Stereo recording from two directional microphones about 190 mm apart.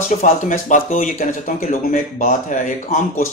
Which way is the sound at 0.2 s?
40° left (ahead or behind).